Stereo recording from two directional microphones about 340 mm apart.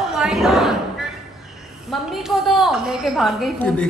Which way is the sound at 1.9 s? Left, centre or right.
Centre.